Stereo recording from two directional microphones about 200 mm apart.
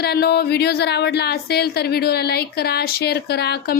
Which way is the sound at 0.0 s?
50° left (ahead or behind).